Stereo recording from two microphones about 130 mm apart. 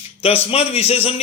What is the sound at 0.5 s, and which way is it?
Speech, 50° left (ahead or behind).